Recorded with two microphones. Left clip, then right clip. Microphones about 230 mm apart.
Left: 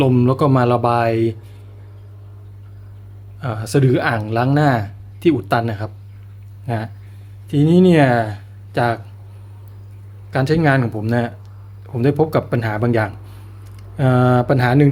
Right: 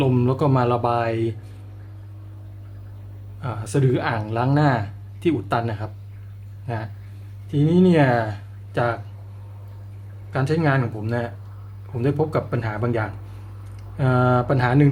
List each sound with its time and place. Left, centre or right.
0.0 s speech: left
3.4 s speech: left
10.3 s speech: left